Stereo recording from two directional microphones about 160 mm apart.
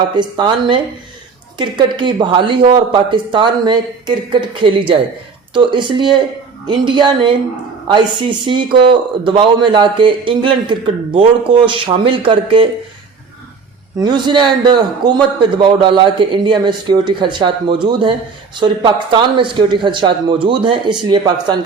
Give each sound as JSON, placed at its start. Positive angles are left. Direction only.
{"t": 0.2, "sound": "a man's voice", "side_deg": -30}
{"t": 14.0, "sound": "a man's voice", "side_deg": -30}